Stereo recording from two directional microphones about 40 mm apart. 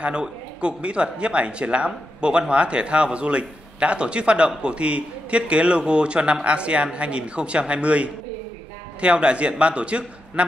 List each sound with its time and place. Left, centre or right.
0.0 s a man's voice: right